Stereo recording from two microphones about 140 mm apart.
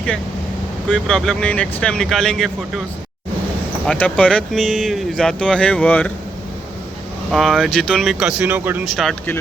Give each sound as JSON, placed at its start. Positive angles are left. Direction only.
{"t": 0.9, "sound": "speech", "side_deg": 5}
{"t": 3.8, "sound": "speech", "side_deg": 10}
{"t": 7.3, "sound": "speech", "side_deg": 0}
{"t": 8.8, "sound": "speech", "side_deg": 0}